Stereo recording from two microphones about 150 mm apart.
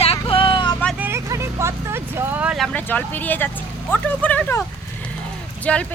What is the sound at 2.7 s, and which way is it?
Speech, 10° left (ahead or behind).